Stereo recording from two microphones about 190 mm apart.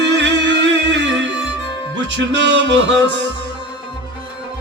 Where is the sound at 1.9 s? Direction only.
70° right (ahead or behind).